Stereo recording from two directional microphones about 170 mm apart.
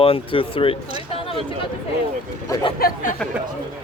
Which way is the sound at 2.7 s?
55° left (ahead or behind).